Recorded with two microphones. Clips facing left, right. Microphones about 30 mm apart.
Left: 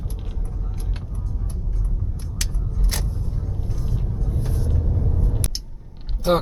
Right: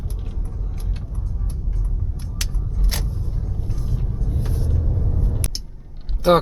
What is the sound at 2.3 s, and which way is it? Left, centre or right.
Vehicle, centre.